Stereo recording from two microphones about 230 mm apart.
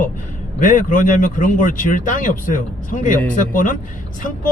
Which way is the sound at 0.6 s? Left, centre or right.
Left.